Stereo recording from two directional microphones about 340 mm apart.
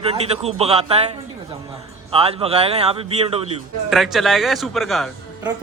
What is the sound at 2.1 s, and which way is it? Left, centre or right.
Speech, centre.